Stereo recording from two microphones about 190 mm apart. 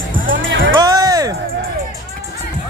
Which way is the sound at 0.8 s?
20° right (ahead or behind).